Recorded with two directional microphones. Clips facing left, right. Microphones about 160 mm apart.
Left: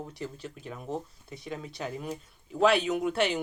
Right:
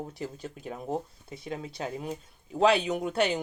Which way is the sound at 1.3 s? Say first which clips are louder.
Right 2 dB; 25° right (ahead or behind).